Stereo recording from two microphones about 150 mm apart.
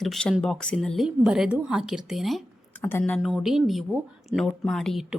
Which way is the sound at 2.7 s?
15° left (ahead or behind).